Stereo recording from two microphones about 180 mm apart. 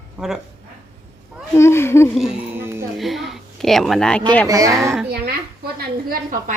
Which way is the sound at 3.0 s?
Centre (ahead or behind).